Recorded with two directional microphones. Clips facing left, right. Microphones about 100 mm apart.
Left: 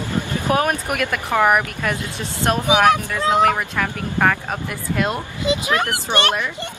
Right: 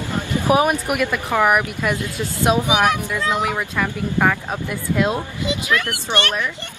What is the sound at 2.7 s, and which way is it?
Speech, 15° right (ahead or behind).